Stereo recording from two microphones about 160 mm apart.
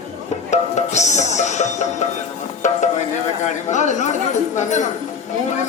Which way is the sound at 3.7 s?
50° left (ahead or behind).